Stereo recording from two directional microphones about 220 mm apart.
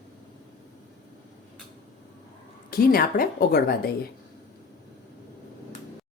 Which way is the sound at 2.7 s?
40° left (ahead or behind).